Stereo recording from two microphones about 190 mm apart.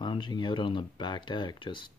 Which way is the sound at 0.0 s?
25° left (ahead or behind).